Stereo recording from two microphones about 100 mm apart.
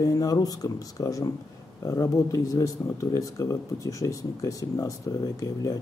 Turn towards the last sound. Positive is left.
turn(degrees=35)  # may be behind; listen again after turning